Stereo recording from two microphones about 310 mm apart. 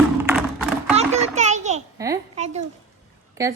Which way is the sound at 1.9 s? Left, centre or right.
Centre.